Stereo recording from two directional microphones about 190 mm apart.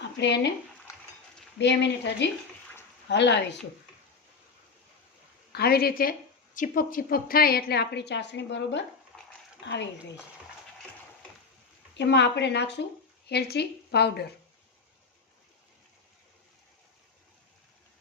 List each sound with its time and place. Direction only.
0.2 s speech: 65° left (ahead or behind)
1.5 s speech: 65° left (ahead or behind)
5.5 s speech: 55° left (ahead or behind)
9.1 s bathtub: centre (ahead or behind)
9.6 s speech: 65° left (ahead or behind)
11.9 s speech: 65° left (ahead or behind)